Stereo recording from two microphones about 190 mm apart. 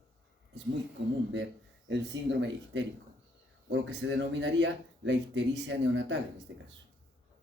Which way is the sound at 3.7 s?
70° right (ahead or behind).